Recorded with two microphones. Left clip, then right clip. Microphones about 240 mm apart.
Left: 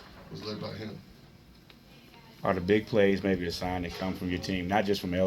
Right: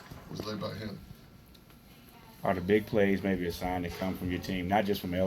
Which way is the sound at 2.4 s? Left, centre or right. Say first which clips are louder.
Left 1 dB; left.